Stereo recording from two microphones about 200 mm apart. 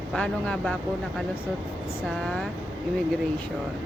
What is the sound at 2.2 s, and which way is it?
Speech, 5° left (ahead or behind).